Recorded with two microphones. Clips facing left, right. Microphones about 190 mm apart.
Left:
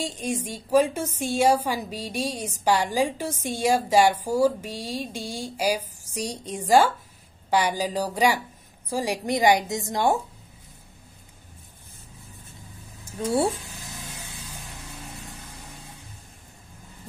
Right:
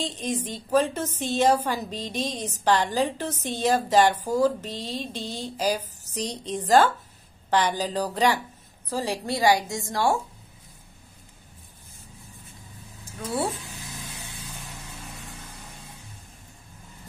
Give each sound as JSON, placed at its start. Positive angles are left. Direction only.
{"t": 0.0, "sound": "a woman's voice", "side_deg": 10}